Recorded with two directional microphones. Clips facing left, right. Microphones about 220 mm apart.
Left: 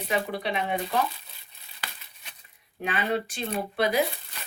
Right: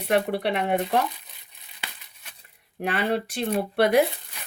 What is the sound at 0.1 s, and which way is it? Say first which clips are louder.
Speech: right 6 dB; 65° right (ahead or behind).